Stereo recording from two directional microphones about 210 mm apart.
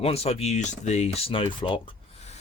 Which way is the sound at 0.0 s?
30° left (ahead or behind).